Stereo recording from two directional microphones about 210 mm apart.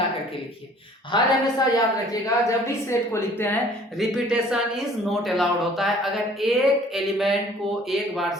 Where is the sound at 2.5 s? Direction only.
15° left (ahead or behind).